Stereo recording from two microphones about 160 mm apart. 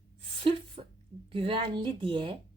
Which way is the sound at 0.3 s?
35° right (ahead or behind).